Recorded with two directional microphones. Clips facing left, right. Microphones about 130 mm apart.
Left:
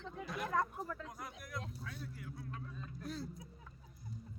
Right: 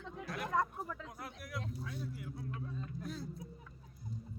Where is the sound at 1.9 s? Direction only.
20° right (ahead or behind).